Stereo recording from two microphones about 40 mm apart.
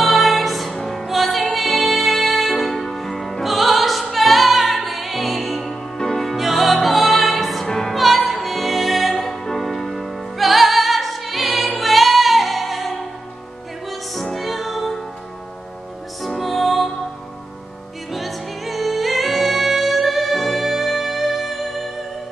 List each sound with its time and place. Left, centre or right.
0.0 s music: centre
7.6 s music: centre
7.9 s music: centre
16.2 s music: centre
18.1 s music: centre